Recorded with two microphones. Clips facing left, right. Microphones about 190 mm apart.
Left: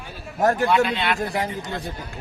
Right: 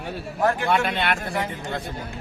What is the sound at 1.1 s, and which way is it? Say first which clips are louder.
Speech: left 2 dB; 35° left (ahead or behind).